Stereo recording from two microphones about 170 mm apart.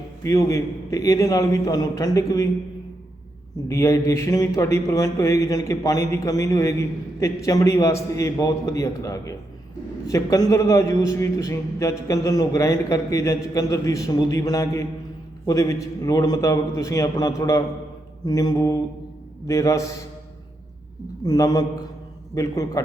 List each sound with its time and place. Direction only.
0.2 s speech: 20° left (ahead or behind)
3.7 s a man's voice: 15° left (ahead or behind)
21.2 s speech: 20° left (ahead or behind)